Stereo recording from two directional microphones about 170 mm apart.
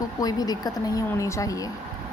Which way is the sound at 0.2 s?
20° left (ahead or behind).